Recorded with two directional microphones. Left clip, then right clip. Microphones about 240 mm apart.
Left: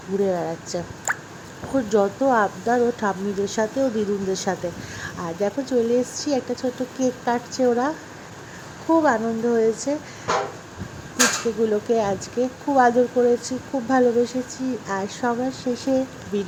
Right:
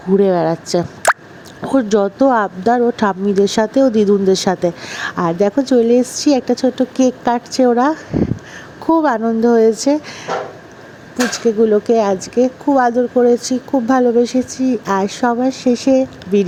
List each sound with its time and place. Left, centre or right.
0.2 s speech: right
9.0 s speech: right
11.6 s speech: right